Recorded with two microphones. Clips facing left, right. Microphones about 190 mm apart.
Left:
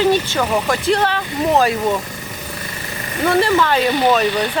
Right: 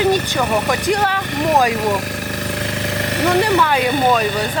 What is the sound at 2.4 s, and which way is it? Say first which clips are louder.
Vehicle: right 8 dB; 90° right.